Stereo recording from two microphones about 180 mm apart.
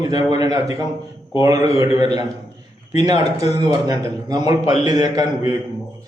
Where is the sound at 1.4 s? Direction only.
20° right (ahead or behind).